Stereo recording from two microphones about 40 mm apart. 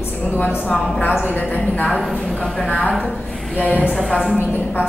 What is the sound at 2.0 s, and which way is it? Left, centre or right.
Speech, centre.